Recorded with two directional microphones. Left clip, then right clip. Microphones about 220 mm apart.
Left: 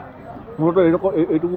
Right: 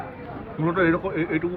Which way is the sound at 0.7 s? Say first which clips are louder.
Left 6 dB; 50° left (ahead or behind).